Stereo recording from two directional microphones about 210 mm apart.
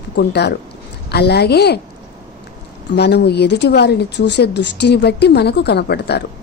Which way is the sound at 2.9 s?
55° left (ahead or behind).